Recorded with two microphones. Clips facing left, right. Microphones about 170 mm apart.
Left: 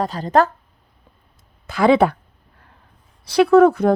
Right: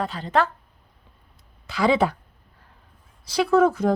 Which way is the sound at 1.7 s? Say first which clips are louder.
Left 6 dB; 55° left (ahead or behind).